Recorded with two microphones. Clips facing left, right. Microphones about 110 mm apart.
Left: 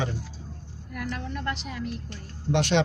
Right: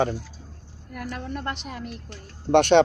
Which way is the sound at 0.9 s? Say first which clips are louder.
Right 1 dB; 45° right (ahead or behind).